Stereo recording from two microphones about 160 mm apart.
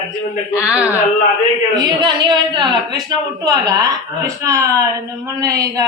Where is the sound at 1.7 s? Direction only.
25° right (ahead or behind).